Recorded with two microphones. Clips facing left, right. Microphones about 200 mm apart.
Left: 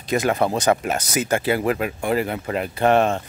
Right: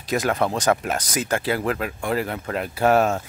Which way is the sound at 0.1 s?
5° left (ahead or behind).